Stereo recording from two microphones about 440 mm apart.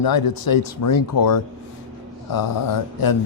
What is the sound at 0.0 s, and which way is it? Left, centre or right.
Speech, left.